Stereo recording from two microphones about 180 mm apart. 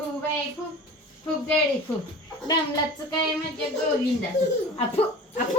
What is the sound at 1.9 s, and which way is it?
Speech, 15° left (ahead or behind).